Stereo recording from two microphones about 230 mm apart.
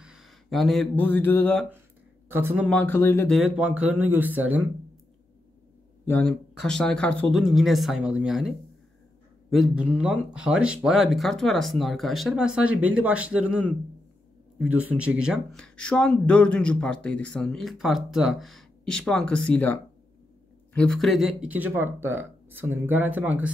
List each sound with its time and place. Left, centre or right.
0.0 s speech: centre
2.3 s speech: centre
2.7 s speech: centre
3.3 s speech: centre
6.0 s speech: centre